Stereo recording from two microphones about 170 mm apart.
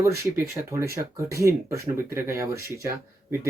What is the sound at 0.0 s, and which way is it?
Speech, 15° right (ahead or behind).